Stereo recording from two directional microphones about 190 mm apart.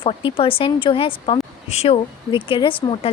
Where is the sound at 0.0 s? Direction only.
25° left (ahead or behind).